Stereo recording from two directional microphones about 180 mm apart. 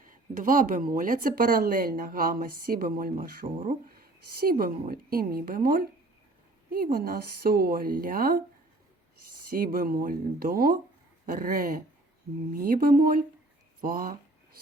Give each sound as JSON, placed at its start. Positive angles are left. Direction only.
{"t": 0.0, "sound": "a woman's voice", "side_deg": -50}
{"t": 9.5, "sound": "speech", "side_deg": -50}